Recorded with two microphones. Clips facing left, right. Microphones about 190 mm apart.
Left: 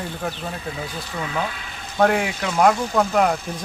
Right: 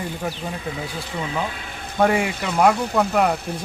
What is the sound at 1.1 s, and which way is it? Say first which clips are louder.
Speech: even; 20° right (ahead or behind).